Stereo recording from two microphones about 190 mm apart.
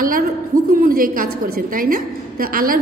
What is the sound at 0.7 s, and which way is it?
A woman's voice, 50° right (ahead or behind).